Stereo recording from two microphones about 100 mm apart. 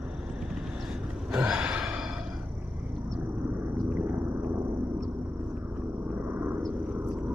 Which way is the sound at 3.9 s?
20° right (ahead or behind).